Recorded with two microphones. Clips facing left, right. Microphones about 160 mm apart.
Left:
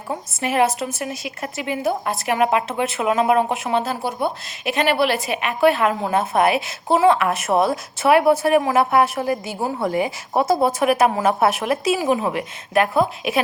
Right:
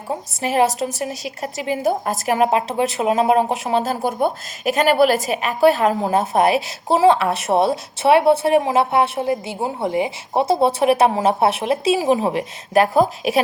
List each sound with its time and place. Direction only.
0.1 s a woman's voice: 35° right (ahead or behind)